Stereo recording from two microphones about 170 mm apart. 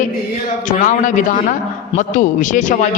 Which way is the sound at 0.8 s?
50° left (ahead or behind).